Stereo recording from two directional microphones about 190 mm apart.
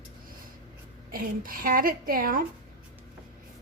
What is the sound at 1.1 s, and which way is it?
A woman's voice, 50° right (ahead or behind).